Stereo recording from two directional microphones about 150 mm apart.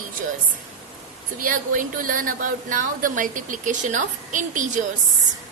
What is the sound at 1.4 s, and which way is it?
A woman's voice, 65° right (ahead or behind).